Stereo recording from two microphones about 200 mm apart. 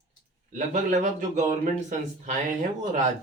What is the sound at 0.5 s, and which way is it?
A man's voice, 40° right (ahead or behind).